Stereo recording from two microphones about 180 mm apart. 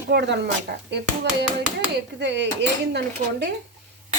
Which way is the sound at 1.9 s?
75° right (ahead or behind).